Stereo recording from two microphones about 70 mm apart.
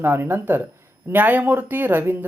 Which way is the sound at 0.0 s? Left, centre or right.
Right.